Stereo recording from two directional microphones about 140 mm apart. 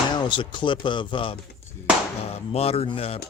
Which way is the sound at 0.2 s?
35° left (ahead or behind).